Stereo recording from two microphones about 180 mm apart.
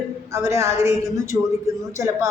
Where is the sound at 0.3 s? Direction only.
15° right (ahead or behind).